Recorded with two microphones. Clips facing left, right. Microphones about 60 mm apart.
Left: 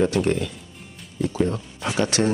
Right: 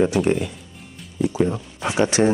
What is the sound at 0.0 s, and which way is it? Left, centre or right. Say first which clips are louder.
Speech: right 2 dB; centre.